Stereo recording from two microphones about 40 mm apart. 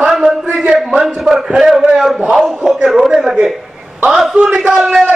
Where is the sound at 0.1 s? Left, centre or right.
Centre.